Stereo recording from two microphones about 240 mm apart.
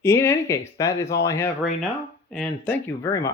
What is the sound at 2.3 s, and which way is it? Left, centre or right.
Speech, centre.